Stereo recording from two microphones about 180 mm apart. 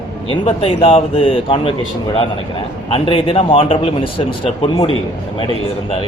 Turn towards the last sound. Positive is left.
turn(degrees=30)  # may be behind; listen again after turning